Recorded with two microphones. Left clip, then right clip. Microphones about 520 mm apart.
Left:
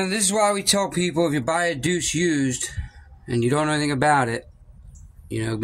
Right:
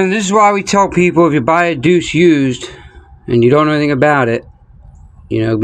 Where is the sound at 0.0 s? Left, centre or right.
Left.